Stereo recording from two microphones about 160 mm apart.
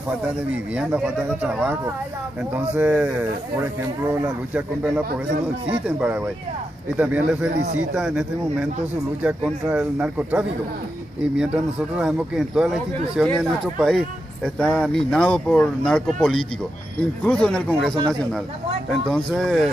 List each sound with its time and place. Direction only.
0.7 s a man's voice: 10° right (ahead or behind)
7.5 s speech: 50° right (ahead or behind)
7.9 s a man's voice: 5° right (ahead or behind)